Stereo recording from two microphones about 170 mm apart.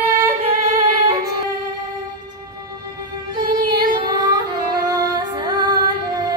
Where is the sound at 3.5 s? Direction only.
25° right (ahead or behind).